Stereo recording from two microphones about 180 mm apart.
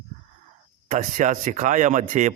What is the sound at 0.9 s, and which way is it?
Speech, 45° right (ahead or behind).